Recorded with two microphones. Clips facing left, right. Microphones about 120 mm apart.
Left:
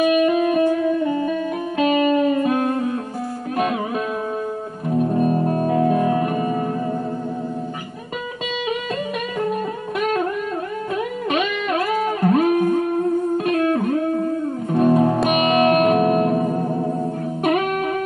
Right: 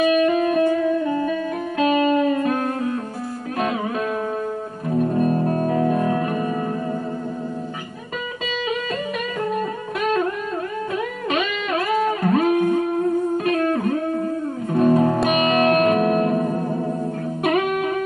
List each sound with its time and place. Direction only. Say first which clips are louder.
0.0 s music: left 1 dB; 10° left (ahead or behind)
1.8 s music: left 1 dB; 20° left (ahead or behind)
2.4 s music: left 2 dB; 10° left (ahead or behind)
4.8 s music: left 1 dB; 5° left (ahead or behind)
11.2 s music: left 2 dB; 5° left (ahead or behind)